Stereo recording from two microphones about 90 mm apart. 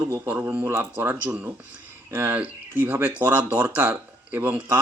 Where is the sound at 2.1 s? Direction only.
25° right (ahead or behind).